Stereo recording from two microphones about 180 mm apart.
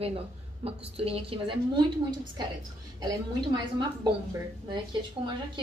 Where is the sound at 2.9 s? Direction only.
25° right (ahead or behind).